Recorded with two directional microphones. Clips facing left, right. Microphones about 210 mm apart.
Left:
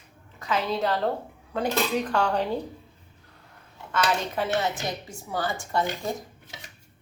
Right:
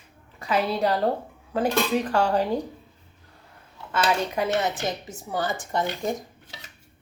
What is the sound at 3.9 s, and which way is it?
A woman's voice, 15° right (ahead or behind).